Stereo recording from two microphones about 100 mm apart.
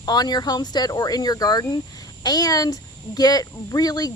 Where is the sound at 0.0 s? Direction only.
40° left (ahead or behind).